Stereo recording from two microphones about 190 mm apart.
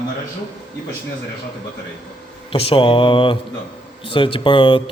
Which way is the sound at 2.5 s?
25° left (ahead or behind).